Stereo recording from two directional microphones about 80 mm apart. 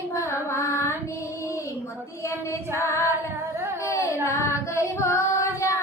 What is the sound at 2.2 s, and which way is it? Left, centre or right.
Female singing, left.